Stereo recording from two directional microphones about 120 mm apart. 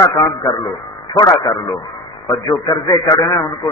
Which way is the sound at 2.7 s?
30° left (ahead or behind).